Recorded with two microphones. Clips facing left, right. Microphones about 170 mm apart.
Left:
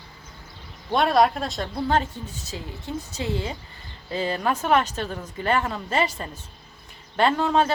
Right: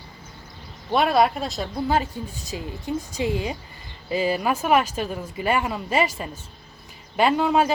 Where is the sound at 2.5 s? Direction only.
15° right (ahead or behind).